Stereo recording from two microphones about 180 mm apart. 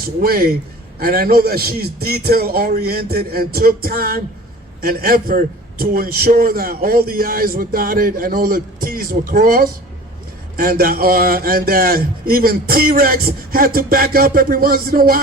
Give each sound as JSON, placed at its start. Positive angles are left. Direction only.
{"t": 0.2, "sound": "a man's voice", "side_deg": -55}